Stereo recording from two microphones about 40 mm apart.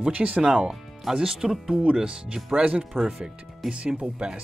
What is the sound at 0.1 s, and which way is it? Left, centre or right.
Speech, right.